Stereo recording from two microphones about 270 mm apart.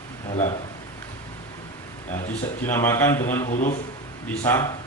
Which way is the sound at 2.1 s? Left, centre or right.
Centre.